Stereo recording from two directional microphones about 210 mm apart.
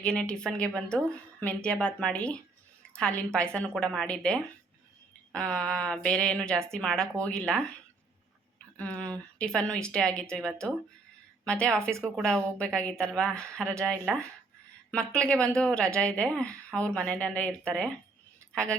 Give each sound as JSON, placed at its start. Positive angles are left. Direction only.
{"t": 0.0, "sound": "speech", "side_deg": 5}
{"t": 8.8, "sound": "speech", "side_deg": 5}
{"t": 11.9, "sound": "speech", "side_deg": -15}
{"t": 12.1, "sound": "speech", "side_deg": 5}